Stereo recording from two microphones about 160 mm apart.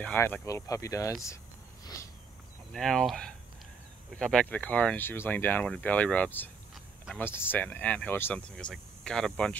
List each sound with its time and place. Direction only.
0.0 s speech: 10° left (ahead or behind)
2.7 s speech: centre (ahead or behind)